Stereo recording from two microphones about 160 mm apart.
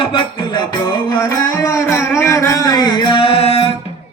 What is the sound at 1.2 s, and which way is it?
Music, 20° left (ahead or behind).